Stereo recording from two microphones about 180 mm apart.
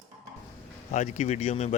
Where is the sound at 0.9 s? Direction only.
40° left (ahead or behind).